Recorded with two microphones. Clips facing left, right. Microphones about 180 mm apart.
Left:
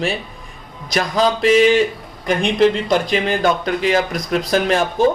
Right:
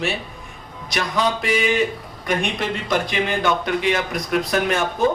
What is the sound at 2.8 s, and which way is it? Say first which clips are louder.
Speech: left 4 dB; 35° left (ahead or behind).